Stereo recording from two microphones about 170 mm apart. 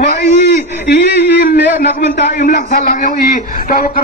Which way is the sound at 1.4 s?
55° left (ahead or behind).